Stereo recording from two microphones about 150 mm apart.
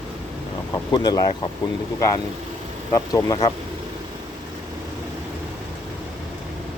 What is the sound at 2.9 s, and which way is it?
Speech, 25° left (ahead or behind).